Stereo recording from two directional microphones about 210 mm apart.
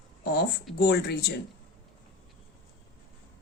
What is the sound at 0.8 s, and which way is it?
Speech, 50° left (ahead or behind).